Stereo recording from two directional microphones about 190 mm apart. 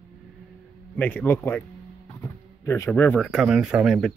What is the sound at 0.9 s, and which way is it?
Speech, 10° left (ahead or behind).